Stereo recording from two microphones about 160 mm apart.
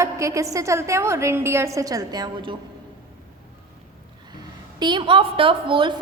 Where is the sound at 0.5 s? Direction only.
20° right (ahead or behind).